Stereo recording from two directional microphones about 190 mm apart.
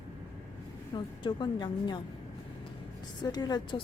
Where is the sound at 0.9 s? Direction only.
25° left (ahead or behind).